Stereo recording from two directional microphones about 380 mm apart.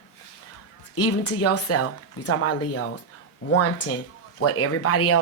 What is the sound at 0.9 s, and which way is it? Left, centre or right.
Speech, left.